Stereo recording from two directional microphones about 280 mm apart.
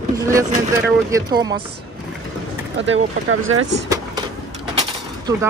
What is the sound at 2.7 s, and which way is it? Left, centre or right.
Speech, right.